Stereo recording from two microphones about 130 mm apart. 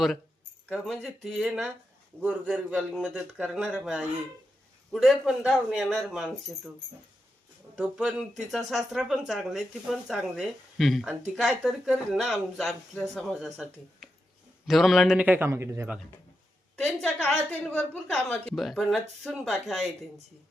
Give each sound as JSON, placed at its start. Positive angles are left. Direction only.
{"t": 0.7, "sound": "a man's voice", "side_deg": -5}
{"t": 7.8, "sound": "a man's voice", "side_deg": -5}
{"t": 16.7, "sound": "a woman's voice", "side_deg": 5}